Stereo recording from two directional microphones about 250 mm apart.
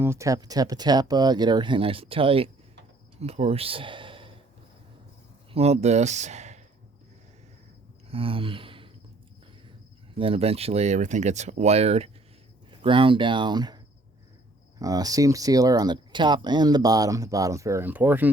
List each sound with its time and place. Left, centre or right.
0.0 s speech: centre
5.5 s speech: right
8.1 s a sound: right
10.2 s speech: right